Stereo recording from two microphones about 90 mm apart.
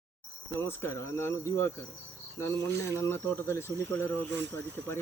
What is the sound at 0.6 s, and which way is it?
Speech, 25° left (ahead or behind).